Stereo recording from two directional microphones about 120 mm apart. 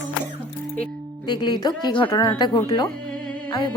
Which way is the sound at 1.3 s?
35° left (ahead or behind).